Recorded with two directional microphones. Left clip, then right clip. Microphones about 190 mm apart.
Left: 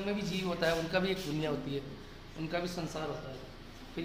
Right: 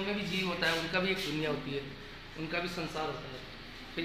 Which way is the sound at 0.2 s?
65° left (ahead or behind).